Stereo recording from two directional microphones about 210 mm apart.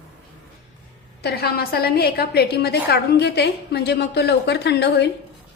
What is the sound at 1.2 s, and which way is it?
A woman's voice, 50° left (ahead or behind).